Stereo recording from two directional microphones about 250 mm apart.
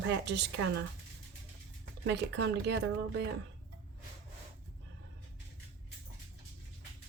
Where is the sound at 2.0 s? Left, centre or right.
Right.